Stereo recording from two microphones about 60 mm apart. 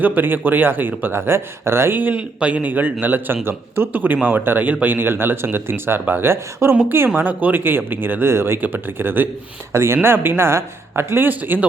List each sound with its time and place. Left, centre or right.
0.0 s speech: right
2.0 s speech: right
7.2 s speech: right